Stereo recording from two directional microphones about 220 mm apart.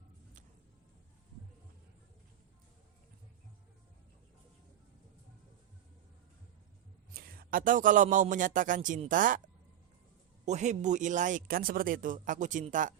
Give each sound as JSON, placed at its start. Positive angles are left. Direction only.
{"t": 7.1, "sound": "speech", "side_deg": -45}
{"t": 10.4, "sound": "speech", "side_deg": -30}